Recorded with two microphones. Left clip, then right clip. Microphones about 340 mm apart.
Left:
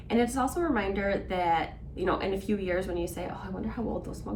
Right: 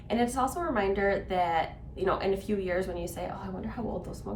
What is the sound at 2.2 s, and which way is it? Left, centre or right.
Speech, centre.